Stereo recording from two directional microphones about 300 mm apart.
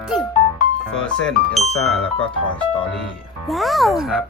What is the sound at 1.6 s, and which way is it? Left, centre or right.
Speech, left.